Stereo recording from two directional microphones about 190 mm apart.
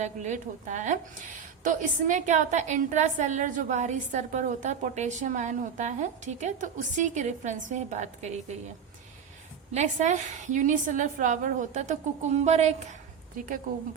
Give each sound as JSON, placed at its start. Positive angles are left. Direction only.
{"t": 0.0, "sound": "a woman's voice", "side_deg": -40}
{"t": 9.7, "sound": "a woman's voice", "side_deg": -40}